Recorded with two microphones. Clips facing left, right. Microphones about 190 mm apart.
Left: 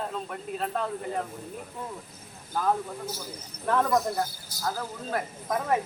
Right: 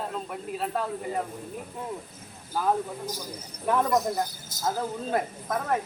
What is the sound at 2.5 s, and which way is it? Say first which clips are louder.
A man's voice: right 1 dB; 10° right (ahead or behind).